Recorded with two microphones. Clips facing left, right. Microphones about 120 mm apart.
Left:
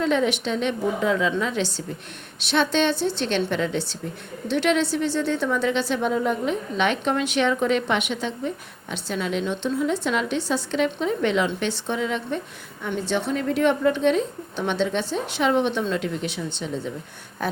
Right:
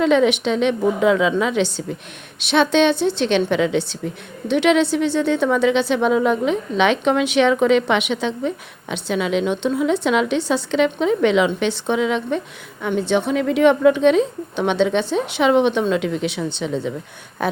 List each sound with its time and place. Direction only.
0.0 s a woman's voice: 80° right
4.4 s a woman's voice: 65° right (ahead or behind); by 12.4 s 85° right
12.9 s a woman's voice: 70° right (ahead or behind)
17.4 s a woman's voice: 70° right (ahead or behind)